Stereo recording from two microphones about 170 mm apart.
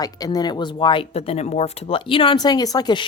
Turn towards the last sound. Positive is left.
turn(degrees=25)  # may be behind; listen again after turning